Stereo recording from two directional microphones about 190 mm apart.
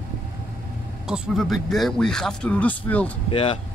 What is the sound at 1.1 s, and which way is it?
A man's voice, centre (ahead or behind).